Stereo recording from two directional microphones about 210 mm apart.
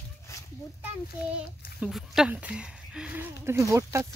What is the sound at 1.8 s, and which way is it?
Speech, centre (ahead or behind).